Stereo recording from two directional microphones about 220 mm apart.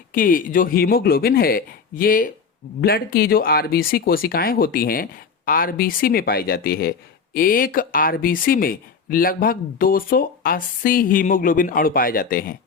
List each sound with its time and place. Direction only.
0.1 s speech: 40° left (ahead or behind)